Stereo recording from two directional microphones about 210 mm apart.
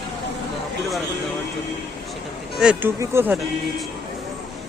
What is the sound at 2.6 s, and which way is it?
Speech, 5° right (ahead or behind).